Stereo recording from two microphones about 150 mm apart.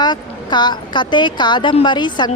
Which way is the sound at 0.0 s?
30° left (ahead or behind).